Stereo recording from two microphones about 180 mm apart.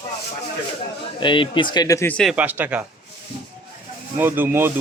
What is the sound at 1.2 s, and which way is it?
Speech, 25° left (ahead or behind).